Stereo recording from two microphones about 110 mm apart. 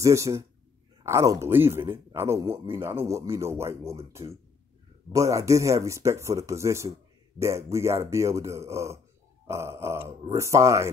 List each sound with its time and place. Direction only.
0.0 s speech: 25° right (ahead or behind)